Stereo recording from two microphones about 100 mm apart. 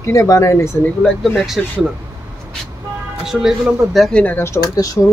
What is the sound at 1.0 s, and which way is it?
Speech, 5° left (ahead or behind).